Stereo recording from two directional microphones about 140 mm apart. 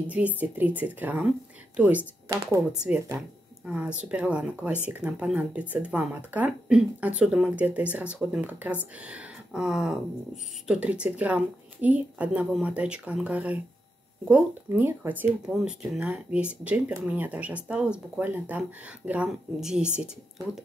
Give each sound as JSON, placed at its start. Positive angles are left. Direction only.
{"t": 0.0, "sound": "speech", "side_deg": -10}
{"t": 2.2, "sound": "speech", "side_deg": -25}
{"t": 2.7, "sound": "speech", "side_deg": -5}
{"t": 14.7, "sound": "speech", "side_deg": -15}